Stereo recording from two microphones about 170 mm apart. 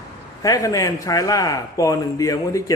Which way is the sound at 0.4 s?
20° left (ahead or behind).